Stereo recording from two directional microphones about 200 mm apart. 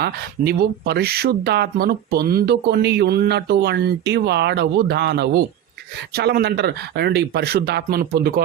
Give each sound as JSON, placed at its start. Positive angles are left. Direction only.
{"t": 0.0, "sound": "speech", "side_deg": -50}